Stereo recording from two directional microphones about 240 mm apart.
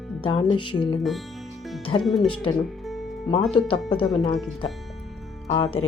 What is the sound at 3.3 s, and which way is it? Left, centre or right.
Speech, centre.